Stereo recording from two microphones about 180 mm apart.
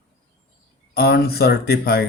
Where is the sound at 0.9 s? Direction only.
60° left (ahead or behind).